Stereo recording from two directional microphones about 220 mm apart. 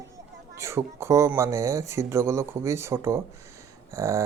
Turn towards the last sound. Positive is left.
turn(degrees=-15)  # may be behind; listen again after turning